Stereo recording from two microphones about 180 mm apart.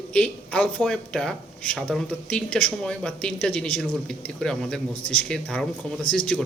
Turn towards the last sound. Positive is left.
turn(degrees=5)  # may be behind; listen again after turning